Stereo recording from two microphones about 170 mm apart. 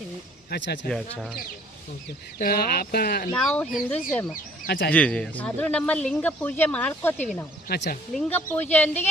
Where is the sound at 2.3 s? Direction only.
65° left (ahead or behind).